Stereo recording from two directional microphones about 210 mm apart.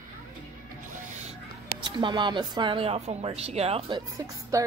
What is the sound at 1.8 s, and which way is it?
Speech, 20° right (ahead or behind).